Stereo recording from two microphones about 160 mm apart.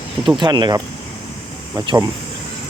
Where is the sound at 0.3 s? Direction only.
30° right (ahead or behind).